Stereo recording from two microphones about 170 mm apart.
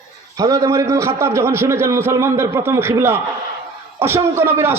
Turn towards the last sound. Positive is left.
turn(degrees=-15)  # may be behind; listen again after turning